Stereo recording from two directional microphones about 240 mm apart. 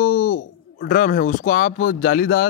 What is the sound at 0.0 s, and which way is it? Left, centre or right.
Speech, left.